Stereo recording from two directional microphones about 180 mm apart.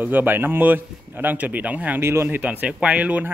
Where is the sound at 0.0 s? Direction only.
10° right (ahead or behind).